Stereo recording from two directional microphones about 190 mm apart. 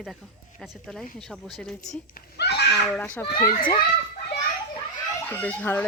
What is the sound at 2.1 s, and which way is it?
Neigh, 60° left (ahead or behind).